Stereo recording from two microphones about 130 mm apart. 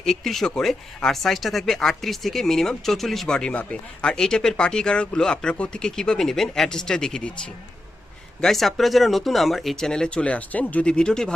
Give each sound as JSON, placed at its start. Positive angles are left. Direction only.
{"t": 0.0, "sound": "speech", "side_deg": 0}
{"t": 8.4, "sound": "speech", "side_deg": 0}